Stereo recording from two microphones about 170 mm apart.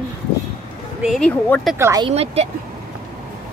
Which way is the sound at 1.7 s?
15° right (ahead or behind).